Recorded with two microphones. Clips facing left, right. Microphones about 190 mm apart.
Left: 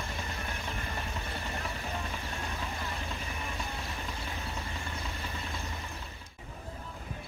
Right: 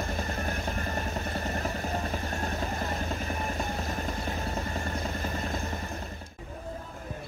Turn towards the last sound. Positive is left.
turn(degrees=-45)  # may be behind; listen again after turning